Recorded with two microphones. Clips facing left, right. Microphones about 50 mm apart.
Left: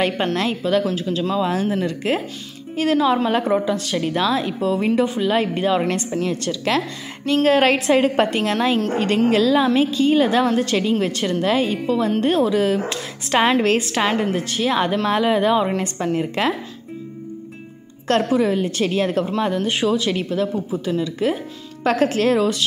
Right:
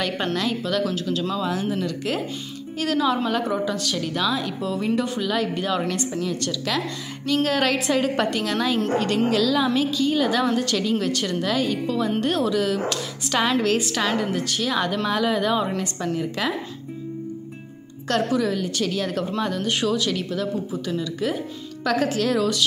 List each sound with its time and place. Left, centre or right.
0.4 s a woman's voice: left
18.0 s a woman's voice: left